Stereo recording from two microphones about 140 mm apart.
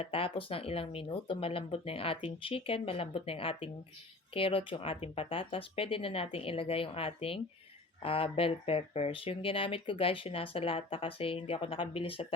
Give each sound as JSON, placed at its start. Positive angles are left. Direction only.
{"t": 0.0, "sound": "speech", "side_deg": 40}